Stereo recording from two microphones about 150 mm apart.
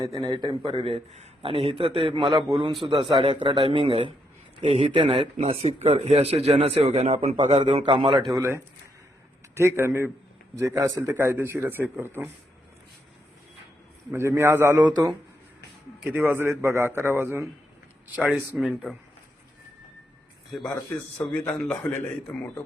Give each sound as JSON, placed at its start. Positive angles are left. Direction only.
{"t": 0.0, "sound": "a man's voice", "side_deg": -25}
{"t": 7.3, "sound": "a man's voice", "side_deg": -35}
{"t": 8.3, "sound": "a man's voice", "side_deg": -20}
{"t": 14.1, "sound": "a man's voice", "side_deg": -15}
{"t": 16.0, "sound": "a man's voice", "side_deg": -15}
{"t": 21.2, "sound": "a man's voice", "side_deg": 10}